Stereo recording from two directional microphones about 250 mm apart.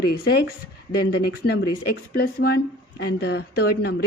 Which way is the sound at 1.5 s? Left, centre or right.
Left.